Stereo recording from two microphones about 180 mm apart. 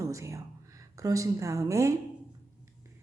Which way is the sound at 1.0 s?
20° right (ahead or behind).